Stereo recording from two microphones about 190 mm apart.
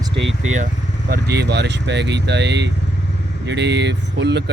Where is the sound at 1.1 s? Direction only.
60° right (ahead or behind).